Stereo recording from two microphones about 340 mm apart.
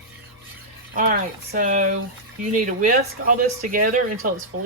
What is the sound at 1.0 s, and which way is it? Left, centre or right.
Speech, right.